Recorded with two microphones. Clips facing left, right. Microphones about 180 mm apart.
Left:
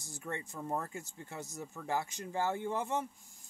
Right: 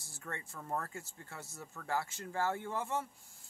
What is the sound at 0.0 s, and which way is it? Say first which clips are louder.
Speech: left 5 dB; 20° left (ahead or behind).